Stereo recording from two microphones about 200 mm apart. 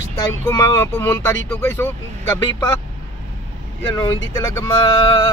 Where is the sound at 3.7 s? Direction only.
15° left (ahead or behind).